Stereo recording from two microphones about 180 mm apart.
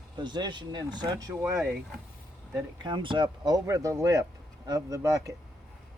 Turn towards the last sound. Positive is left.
turn(degrees=-20)  # may be behind; listen again after turning